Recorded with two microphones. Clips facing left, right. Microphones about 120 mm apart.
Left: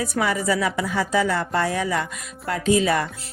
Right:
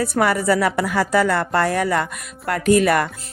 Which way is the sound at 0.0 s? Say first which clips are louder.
Right 4 dB; 60° right (ahead or behind).